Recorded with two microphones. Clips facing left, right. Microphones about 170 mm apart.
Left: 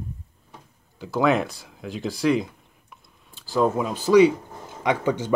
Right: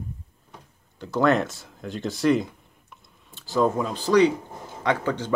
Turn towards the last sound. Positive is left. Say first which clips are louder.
# left 2 dB
turn(degrees=10)  # may be behind; listen again after turning